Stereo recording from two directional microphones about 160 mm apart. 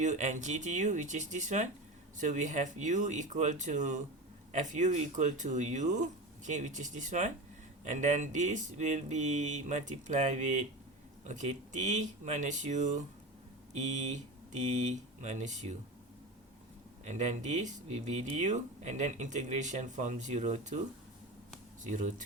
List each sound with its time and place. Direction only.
0.0 s speech: 50° right (ahead or behind)
17.1 s speech: 45° right (ahead or behind)